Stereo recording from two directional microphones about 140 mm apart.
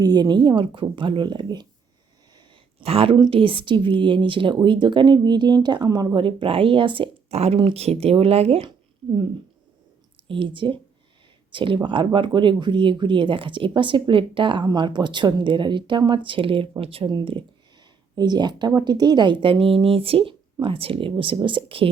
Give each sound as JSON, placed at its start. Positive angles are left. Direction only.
{"t": 0.0, "sound": "speech", "side_deg": -30}
{"t": 2.8, "sound": "speech", "side_deg": -45}
{"t": 10.2, "sound": "speech", "side_deg": -35}